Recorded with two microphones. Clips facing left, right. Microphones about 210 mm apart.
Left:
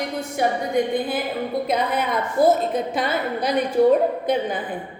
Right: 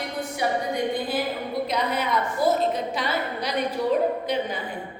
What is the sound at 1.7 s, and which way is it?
A woman's voice, 50° left (ahead or behind).